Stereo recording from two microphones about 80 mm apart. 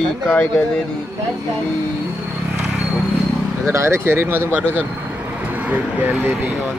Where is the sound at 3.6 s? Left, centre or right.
Right.